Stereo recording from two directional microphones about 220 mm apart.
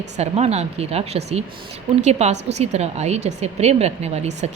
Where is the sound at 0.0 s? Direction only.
30° right (ahead or behind).